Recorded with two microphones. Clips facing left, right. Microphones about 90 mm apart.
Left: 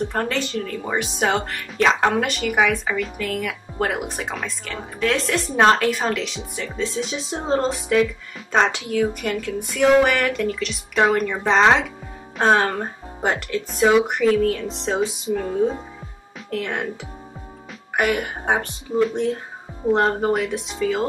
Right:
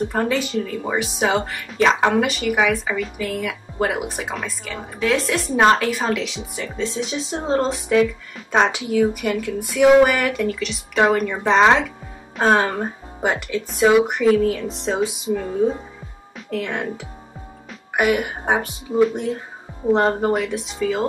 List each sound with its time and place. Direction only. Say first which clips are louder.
0.1 s speech: right 3 dB; 5° right (ahead or behind)
16.6 s speech: right 1 dB; centre (ahead or behind)